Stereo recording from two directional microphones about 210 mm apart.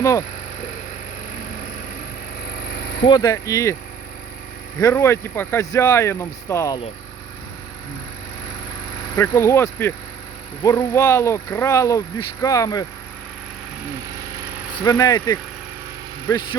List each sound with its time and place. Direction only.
0.0 s speech: 15° left (ahead or behind)
2.6 s vehicle: 50° left (ahead or behind)
3.1 s speech: 15° left (ahead or behind)
4.8 s speech: 15° left (ahead or behind)
9.0 s speech: 15° left (ahead or behind)
14.2 s vehicle: 15° right (ahead or behind)
14.8 s speech: 20° left (ahead or behind)